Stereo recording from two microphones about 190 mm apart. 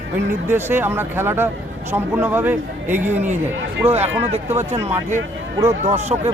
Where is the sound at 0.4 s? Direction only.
10° right (ahead or behind).